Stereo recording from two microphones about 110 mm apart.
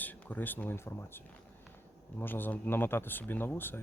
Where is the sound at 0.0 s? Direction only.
15° left (ahead or behind).